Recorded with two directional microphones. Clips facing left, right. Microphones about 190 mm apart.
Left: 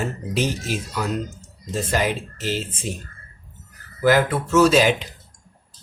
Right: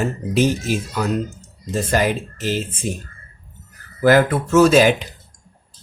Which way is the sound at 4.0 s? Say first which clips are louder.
Right 3 dB; 50° right (ahead or behind).